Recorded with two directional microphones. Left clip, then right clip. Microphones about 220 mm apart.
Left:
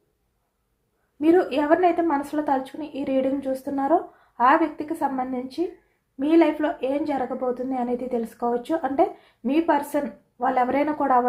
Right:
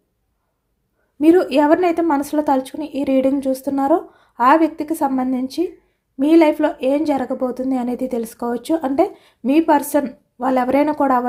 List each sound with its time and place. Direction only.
1.2 s a woman's voice: 55° right (ahead or behind)